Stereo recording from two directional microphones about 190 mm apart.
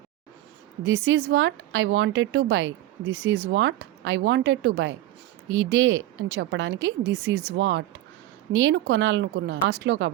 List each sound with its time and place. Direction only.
0.9 s a woman's voice: 90° right; by 4.9 s 70° right (ahead or behind)
5.5 s a woman's voice: 85° right